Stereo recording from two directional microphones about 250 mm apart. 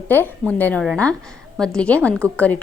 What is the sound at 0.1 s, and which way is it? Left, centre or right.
A woman's voice, centre.